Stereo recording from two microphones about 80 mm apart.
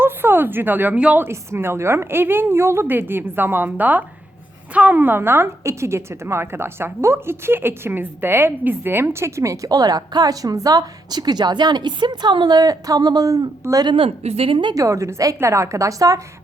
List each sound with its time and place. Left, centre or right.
0.0 s speech: right
1.2 s a woman's voice: right
14.5 s a woman's voice: right
14.8 s a woman's voice: right